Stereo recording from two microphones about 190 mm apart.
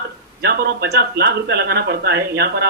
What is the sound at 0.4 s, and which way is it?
Speech, 55° right (ahead or behind).